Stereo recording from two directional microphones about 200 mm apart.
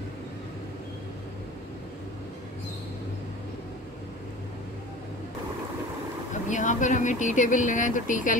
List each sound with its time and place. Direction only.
6.5 s speech: 40° left (ahead or behind)